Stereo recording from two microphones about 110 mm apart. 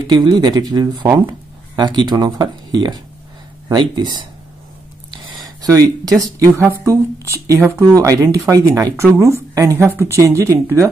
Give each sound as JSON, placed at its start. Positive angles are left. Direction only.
{"t": 0.0, "sound": "speech", "side_deg": -40}
{"t": 1.0, "sound": "speech", "side_deg": -20}
{"t": 1.8, "sound": "speech", "side_deg": -45}
{"t": 5.1, "sound": "a sound", "side_deg": -45}
{"t": 5.6, "sound": "speech", "side_deg": -35}